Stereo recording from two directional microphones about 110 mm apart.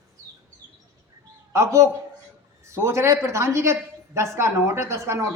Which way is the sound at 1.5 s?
25° right (ahead or behind).